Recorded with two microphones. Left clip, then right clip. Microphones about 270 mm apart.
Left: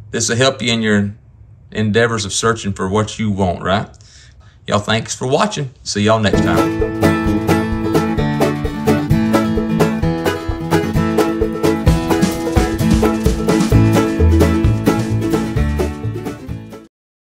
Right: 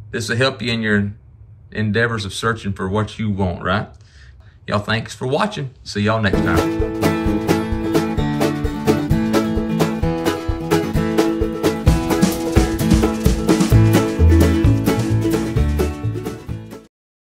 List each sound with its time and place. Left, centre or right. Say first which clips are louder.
0.1 s speech: left 4 dB; centre
4.6 s music: left 4 dB; centre